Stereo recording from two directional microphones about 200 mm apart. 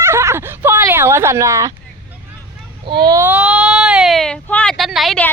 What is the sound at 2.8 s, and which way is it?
Speech, 20° right (ahead or behind).